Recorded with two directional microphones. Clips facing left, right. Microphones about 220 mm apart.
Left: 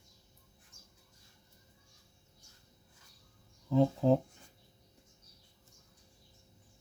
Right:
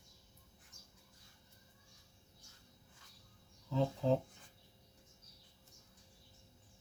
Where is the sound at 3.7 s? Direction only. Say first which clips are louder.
Left 7 dB; 50° left (ahead or behind).